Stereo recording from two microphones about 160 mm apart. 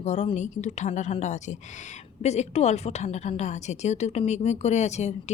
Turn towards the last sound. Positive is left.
turn(degrees=45)  # may be behind; listen again after turning